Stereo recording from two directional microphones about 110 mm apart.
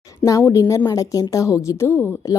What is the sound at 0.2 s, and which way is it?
A woman's voice, 25° left (ahead or behind).